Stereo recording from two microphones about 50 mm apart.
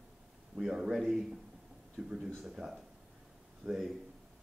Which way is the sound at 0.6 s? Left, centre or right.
Centre.